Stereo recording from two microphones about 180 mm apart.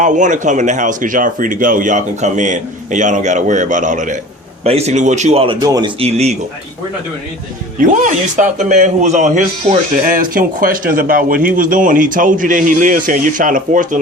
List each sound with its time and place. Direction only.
0.0 s a man's voice: 45° right (ahead or behind); by 5.9 s 20° right (ahead or behind)
6.0 s a man's voice: 35° right (ahead or behind)
7.8 s speech: 45° right (ahead or behind)